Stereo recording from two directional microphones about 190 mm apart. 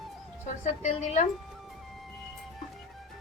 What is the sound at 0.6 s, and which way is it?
Speech, 40° left (ahead or behind).